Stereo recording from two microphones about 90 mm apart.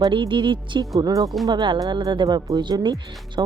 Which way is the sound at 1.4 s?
60° right (ahead or behind).